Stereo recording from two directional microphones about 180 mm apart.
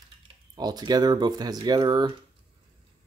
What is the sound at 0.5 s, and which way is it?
Speech, 25° right (ahead or behind).